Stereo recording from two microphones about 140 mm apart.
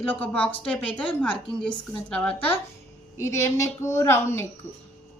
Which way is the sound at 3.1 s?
20° left (ahead or behind).